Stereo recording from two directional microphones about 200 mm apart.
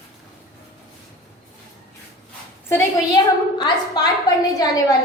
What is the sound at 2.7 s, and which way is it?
A woman's voice, 20° left (ahead or behind).